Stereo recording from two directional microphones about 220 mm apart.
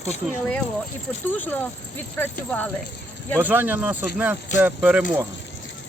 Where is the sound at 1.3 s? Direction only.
10° left (ahead or behind).